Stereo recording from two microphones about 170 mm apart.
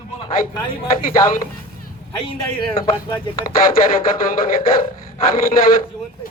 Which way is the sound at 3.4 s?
55° left (ahead or behind).